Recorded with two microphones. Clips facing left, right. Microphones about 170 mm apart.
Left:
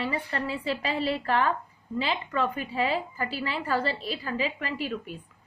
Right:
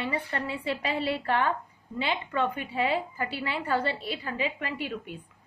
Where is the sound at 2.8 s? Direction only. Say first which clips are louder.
Even; 20° right (ahead or behind).